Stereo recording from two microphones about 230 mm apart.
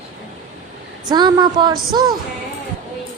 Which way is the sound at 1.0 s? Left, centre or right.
Centre.